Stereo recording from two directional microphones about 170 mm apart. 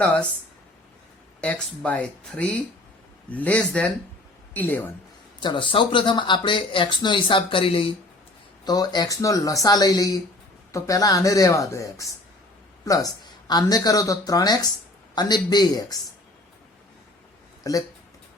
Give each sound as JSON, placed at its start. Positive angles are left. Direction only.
{"t": 0.0, "sound": "speech", "side_deg": 10}
{"t": 1.4, "sound": "speech", "side_deg": 5}
{"t": 5.4, "sound": "speech", "side_deg": 30}
{"t": 17.6, "sound": "speech", "side_deg": 20}